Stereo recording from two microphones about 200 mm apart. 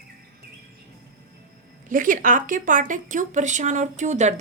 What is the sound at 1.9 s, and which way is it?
A woman's voice, 40° right (ahead or behind).